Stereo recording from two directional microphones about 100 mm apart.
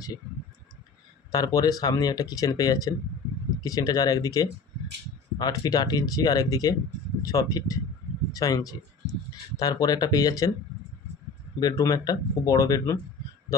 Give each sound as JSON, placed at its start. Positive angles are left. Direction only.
{"t": 1.3, "sound": "speech", "side_deg": 40}
{"t": 11.6, "sound": "speech", "side_deg": 35}